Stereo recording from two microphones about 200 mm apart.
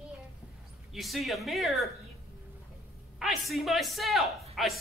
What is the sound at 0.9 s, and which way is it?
Speech, centre (ahead or behind).